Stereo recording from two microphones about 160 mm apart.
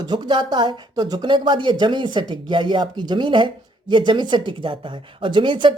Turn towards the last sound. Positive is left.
turn(degrees=-30)  # may be behind; listen again after turning